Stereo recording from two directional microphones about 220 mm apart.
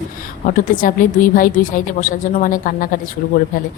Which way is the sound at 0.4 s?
40° left (ahead or behind).